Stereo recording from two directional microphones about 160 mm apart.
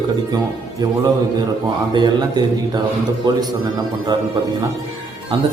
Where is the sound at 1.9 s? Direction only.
30° right (ahead or behind).